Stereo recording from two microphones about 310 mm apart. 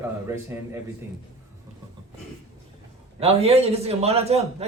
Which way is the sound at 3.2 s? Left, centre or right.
Centre.